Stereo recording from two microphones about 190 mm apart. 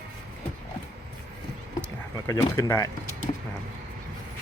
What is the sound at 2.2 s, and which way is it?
Speech, 15° left (ahead or behind).